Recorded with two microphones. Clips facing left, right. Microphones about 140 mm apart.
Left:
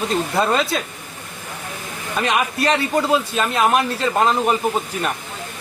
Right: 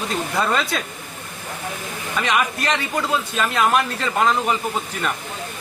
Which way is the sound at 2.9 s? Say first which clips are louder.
Left 4 dB; 25° left (ahead or behind).